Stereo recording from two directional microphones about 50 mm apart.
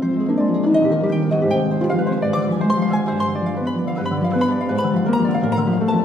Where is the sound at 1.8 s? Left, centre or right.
Centre.